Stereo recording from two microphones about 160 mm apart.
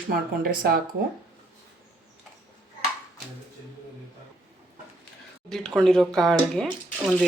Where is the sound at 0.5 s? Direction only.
65° right (ahead or behind).